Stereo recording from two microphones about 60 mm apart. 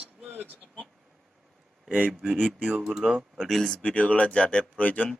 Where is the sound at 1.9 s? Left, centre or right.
Right.